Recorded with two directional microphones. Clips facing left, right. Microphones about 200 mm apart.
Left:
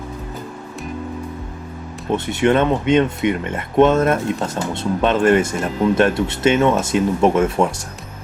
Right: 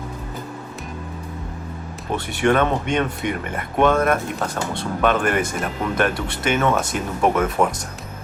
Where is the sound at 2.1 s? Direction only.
20° left (ahead or behind).